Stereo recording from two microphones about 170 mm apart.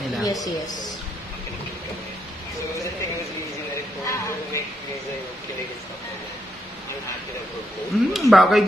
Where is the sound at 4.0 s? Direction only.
15° left (ahead or behind).